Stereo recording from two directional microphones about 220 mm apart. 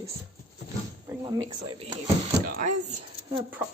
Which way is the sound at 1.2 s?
20° right (ahead or behind).